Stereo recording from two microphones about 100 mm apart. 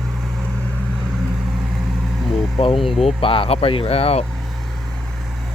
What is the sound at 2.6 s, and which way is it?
Speech, 65° left (ahead or behind).